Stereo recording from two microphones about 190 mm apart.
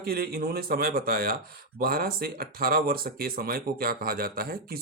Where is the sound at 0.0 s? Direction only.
50° right (ahead or behind).